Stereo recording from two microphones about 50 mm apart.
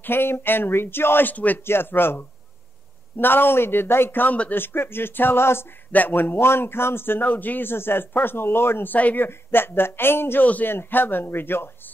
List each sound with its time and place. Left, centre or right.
0.0 s a man's voice: left
1.3 s speech: left
1.7 s a man's voice: left
5.9 s a man's voice: left
8.9 s a man's voice: left
10.4 s speech: left
10.7 s a man's voice: left